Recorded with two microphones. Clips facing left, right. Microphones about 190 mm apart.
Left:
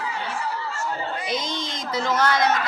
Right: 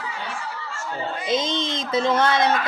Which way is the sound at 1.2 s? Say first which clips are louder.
Right 5 dB; 25° right (ahead or behind).